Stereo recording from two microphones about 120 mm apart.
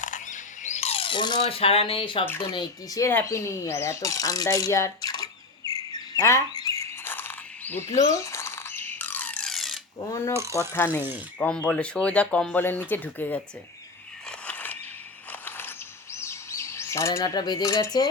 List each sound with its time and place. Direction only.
0.0 s a sound: 90° left; by 1.5 s 40° left (ahead or behind)
1.5 s speech: 50° left (ahead or behind)
2.2 s speech: 20° left (ahead or behind)
2.5 s speech: 40° left (ahead or behind)
3.0 s speech: 15° left (ahead or behind); by 6.8 s 30° left (ahead or behind)
6.9 s a sound: 15° left (ahead or behind)
8.0 s squawk: 25° left (ahead or behind); by 9.8 s centre (ahead or behind)
10.7 s speech: 20° left (ahead or behind)
14.3 s a sound: 10° left (ahead or behind)
16.1 s chirp: 25° left (ahead or behind)